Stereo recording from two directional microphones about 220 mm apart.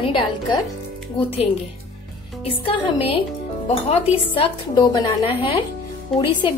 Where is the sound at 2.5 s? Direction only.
25° left (ahead or behind).